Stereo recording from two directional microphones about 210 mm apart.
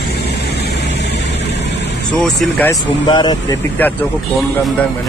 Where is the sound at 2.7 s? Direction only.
20° left (ahead or behind).